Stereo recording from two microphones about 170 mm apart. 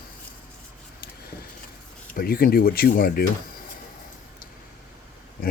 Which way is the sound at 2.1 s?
60° left (ahead or behind).